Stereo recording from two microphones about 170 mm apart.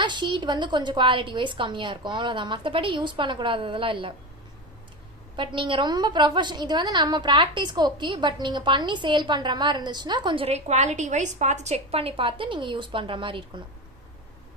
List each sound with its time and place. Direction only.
0.0 s a woman's voice: 25° right (ahead or behind)
5.4 s a woman's voice: 30° right (ahead or behind)